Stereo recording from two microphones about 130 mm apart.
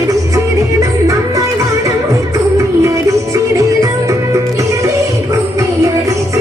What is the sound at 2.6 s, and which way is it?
Music, 25° right (ahead or behind).